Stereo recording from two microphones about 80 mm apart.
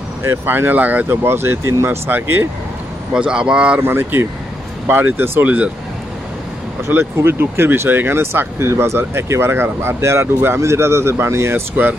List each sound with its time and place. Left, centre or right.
0.2 s speech: right
3.1 s speech: centre
3.8 s speech: right
6.9 s speech: right